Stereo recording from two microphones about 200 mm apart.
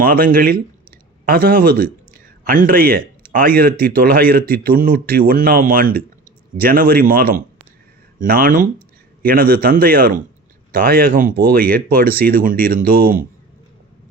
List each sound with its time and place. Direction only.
0.0 s speech: 45° right (ahead or behind)